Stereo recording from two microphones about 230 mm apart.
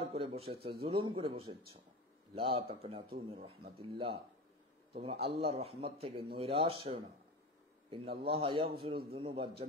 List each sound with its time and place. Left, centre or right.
0.0 s a man's voice: right